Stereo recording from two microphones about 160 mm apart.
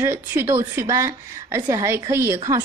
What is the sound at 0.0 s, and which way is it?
A woman's voice, 15° right (ahead or behind).